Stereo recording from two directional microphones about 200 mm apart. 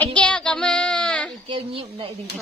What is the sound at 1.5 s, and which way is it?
Speech, 25° right (ahead or behind).